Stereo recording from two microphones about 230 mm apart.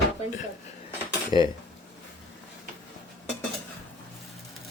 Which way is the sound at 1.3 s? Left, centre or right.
Centre.